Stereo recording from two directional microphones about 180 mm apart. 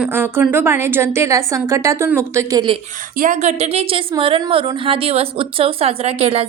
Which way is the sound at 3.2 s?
40° right (ahead or behind).